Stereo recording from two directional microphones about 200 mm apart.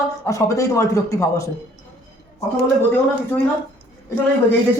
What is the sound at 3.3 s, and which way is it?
Speech, 10° left (ahead or behind).